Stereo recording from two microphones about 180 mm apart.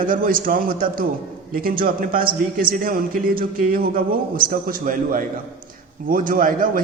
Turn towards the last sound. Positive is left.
turn(degrees=-50)  # may be behind; listen again after turning